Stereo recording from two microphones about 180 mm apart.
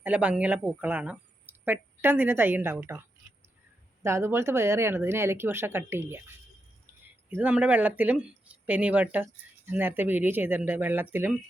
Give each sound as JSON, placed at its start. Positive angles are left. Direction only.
{"t": 0.0, "sound": "speech", "side_deg": -5}
{"t": 4.0, "sound": "speech", "side_deg": -15}
{"t": 7.3, "sound": "speech", "side_deg": -10}